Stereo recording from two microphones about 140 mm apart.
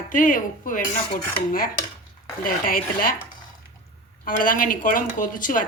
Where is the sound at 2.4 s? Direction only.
90° left.